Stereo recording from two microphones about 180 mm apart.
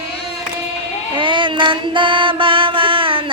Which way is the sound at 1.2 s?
25° right (ahead or behind).